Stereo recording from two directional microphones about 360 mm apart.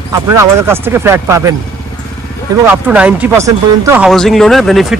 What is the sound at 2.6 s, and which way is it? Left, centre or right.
Speech, centre.